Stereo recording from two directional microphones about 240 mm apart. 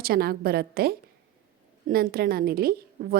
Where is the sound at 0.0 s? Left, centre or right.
Right.